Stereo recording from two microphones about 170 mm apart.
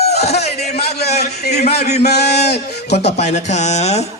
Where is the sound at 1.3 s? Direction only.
70° left (ahead or behind).